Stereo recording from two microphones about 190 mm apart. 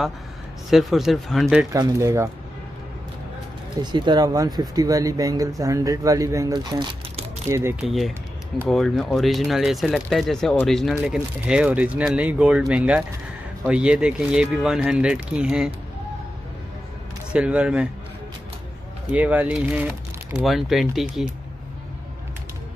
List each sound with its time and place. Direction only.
0.7 s speech: centre (ahead or behind)
1.7 s speech: 15° right (ahead or behind)
3.8 s speech: 25° right (ahead or behind)
7.8 s speech: centre (ahead or behind)
17.3 s speech: 5° right (ahead or behind)
19.1 s speech: 10° right (ahead or behind)